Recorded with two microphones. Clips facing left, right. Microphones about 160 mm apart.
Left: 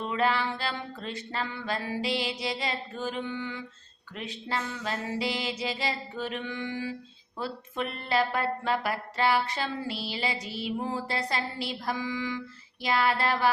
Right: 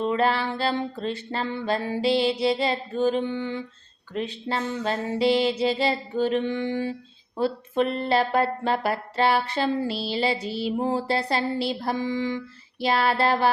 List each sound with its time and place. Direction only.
0.0 s music: 30° right (ahead or behind)
7.3 s speech: 30° right (ahead or behind)
12.8 s music: 30° right (ahead or behind)